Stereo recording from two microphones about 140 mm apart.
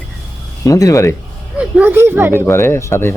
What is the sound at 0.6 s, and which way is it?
Speech, 25° left (ahead or behind).